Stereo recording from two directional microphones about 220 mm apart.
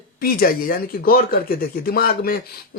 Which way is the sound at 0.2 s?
40° left (ahead or behind).